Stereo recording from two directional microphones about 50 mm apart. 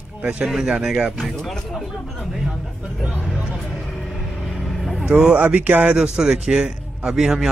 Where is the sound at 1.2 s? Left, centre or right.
Centre.